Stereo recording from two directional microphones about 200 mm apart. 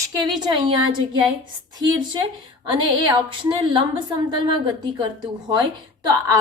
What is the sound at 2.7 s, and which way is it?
A woman's voice, 25° right (ahead or behind).